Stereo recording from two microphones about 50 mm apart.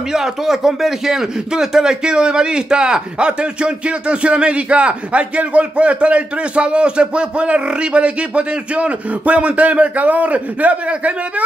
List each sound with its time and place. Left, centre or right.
0.1 s speech: centre; by 11.4 s right